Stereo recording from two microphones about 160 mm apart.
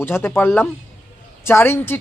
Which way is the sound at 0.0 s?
15° left (ahead or behind).